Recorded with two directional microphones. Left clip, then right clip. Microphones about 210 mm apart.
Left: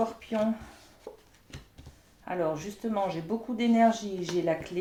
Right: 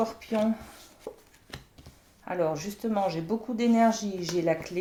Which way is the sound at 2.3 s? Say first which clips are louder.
Right 2 dB; 30° right (ahead or behind).